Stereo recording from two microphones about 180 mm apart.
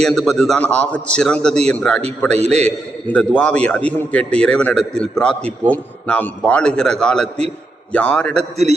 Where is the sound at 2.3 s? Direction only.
35° right (ahead or behind).